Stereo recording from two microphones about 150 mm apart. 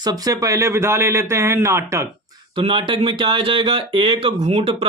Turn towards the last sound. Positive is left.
turn(degrees=-40)  # may be behind; listen again after turning